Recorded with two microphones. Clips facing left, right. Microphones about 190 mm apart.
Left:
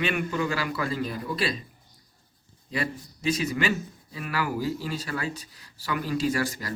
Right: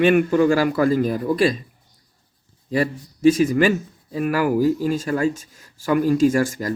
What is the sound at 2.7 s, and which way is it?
A man's voice, 45° right (ahead or behind).